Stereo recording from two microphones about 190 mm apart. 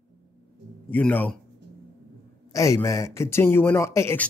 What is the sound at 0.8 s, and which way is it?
Speech, 10° left (ahead or behind).